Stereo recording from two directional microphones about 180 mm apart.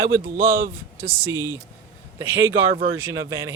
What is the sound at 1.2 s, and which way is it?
Speech, 15° right (ahead or behind).